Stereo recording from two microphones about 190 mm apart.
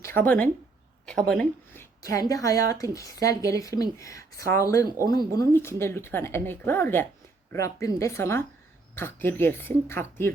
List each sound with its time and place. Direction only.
0.0 s speech: 10° left (ahead or behind)
1.0 s a sound: 5° left (ahead or behind)
2.3 s speech: 20° left (ahead or behind)